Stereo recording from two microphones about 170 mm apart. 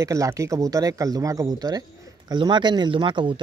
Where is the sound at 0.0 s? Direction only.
20° right (ahead or behind).